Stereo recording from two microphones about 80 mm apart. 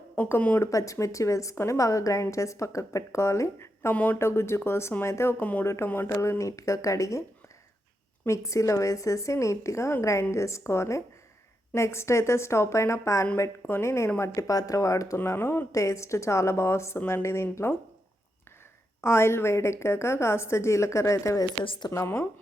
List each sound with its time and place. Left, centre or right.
0.3 s speech: left
0.6 s a woman's voice: left
3.9 s speech: centre
4.2 s a woman's voice: left
6.4 s speech: left
8.3 s a woman's voice: left
14.2 s speech: left
15.2 s a woman's voice: left
19.0 s a woman's voice: left
21.6 s a woman's voice: left
21.9 s a woman's voice: left